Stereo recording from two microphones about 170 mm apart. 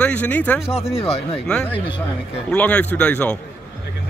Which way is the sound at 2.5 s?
10° left (ahead or behind).